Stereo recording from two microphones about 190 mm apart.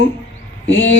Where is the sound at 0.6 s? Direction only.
80° left.